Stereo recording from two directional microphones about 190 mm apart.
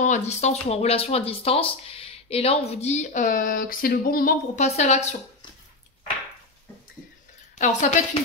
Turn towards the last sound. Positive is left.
turn(degrees=40)  # may be behind; listen again after turning